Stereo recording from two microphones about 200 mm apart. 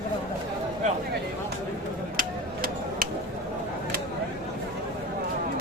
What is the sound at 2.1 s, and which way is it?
Tick-tock, 45° right (ahead or behind).